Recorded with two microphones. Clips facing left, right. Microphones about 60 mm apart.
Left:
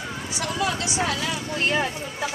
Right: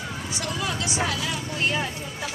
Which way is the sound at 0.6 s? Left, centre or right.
Left.